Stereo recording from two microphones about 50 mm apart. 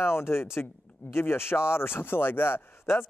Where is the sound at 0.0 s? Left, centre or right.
Left.